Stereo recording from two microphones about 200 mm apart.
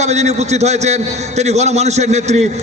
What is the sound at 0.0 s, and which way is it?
A man's voice, 35° right (ahead or behind).